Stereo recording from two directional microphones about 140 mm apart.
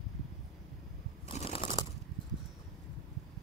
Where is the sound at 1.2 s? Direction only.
55° left (ahead or behind).